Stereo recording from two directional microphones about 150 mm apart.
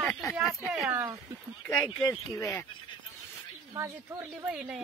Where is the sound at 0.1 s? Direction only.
15° left (ahead or behind).